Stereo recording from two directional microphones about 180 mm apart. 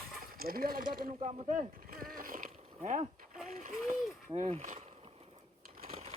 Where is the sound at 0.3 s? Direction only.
55° right (ahead or behind).